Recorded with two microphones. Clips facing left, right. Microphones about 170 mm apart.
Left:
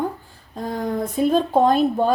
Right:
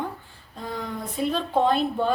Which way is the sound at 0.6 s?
45° left (ahead or behind).